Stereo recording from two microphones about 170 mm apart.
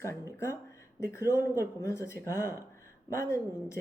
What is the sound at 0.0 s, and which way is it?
Speech, 15° left (ahead or behind).